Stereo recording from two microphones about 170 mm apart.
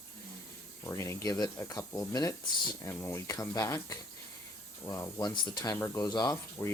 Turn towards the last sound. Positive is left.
turn(degrees=25)  # may be behind; listen again after turning